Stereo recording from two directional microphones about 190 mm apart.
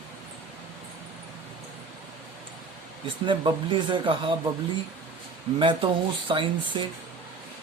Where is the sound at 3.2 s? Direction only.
25° right (ahead or behind).